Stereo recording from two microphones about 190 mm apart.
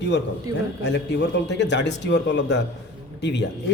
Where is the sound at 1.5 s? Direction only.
65° left (ahead or behind).